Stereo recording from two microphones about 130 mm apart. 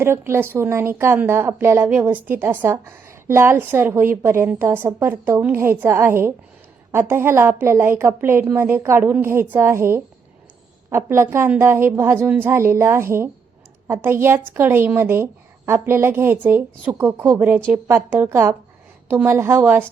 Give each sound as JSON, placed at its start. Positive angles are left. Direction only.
{"t": 0.0, "sound": "a woman's voice", "side_deg": -20}